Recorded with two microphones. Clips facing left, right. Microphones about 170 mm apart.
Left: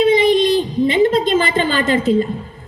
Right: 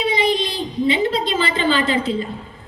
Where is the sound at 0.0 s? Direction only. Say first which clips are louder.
Left 7 dB; 50° left (ahead or behind).